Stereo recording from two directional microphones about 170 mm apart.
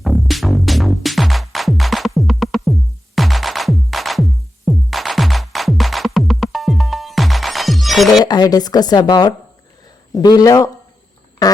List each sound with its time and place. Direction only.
0.0 s music: centre (ahead or behind)
8.2 s a woman's voice: 25° left (ahead or behind)
11.4 s fart: 20° left (ahead or behind)